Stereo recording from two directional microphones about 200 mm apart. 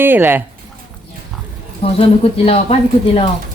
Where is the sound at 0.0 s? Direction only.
10° right (ahead or behind).